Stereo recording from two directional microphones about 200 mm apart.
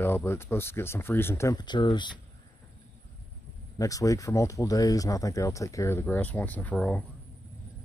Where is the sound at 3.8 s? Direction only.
15° left (ahead or behind).